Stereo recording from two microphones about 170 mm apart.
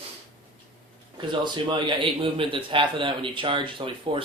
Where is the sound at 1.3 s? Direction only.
25° right (ahead or behind).